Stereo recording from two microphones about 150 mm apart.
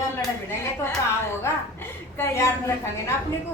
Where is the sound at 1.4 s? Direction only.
15° left (ahead or behind).